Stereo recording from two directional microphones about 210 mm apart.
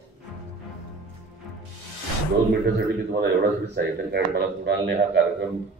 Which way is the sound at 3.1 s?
50° right (ahead or behind).